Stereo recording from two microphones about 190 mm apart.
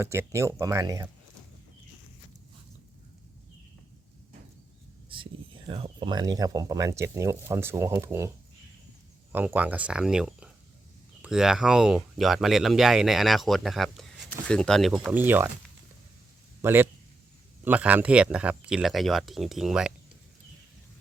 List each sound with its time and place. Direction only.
0.0 s speech: 15° right (ahead or behind)
5.0 s speech: 25° right (ahead or behind)
9.3 s speech: 10° right (ahead or behind)
16.6 s a man's voice: 10° right (ahead or behind)